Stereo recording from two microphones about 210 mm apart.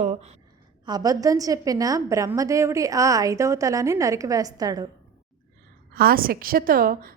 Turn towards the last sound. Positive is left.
turn(degrees=-45)  # may be behind; listen again after turning